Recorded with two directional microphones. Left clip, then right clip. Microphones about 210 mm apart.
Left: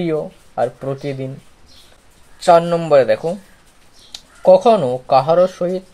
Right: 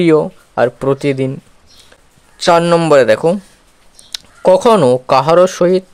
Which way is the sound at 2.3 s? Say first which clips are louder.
Right 2 dB; 40° right (ahead or behind).